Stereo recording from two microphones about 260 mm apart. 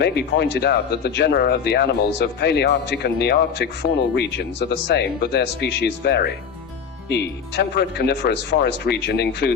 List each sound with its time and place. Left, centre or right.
0.0 s speech: left